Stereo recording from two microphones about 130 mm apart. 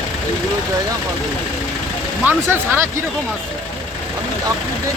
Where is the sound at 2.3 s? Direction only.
15° right (ahead or behind).